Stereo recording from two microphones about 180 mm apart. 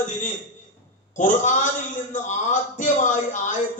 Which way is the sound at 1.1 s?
45° left (ahead or behind).